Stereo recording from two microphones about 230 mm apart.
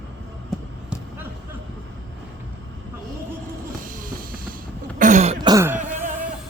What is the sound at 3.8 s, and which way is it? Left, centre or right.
Music, right.